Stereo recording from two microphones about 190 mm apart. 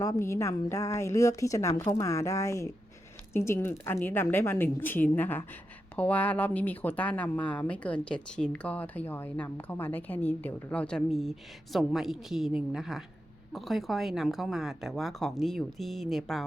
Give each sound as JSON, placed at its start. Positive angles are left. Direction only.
{"t": 0.0, "sound": "speech", "side_deg": 15}